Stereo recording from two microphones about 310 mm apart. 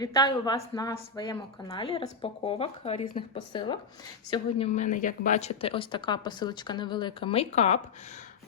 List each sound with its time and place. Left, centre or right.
0.0 s a woman's voice: centre